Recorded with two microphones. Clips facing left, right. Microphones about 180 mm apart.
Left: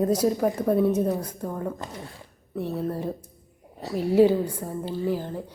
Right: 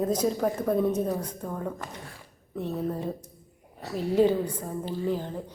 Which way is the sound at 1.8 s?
25° left (ahead or behind).